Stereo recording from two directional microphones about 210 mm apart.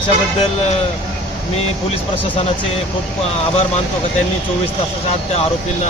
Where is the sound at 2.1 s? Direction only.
30° left (ahead or behind).